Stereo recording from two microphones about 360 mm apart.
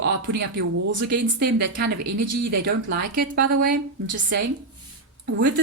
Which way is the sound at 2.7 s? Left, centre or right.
Right.